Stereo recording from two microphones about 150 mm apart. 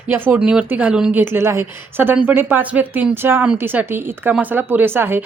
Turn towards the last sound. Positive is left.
turn(degrees=-15)  # may be behind; listen again after turning